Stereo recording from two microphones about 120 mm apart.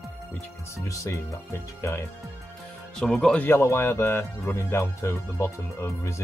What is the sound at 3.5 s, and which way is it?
Speech, 20° left (ahead or behind).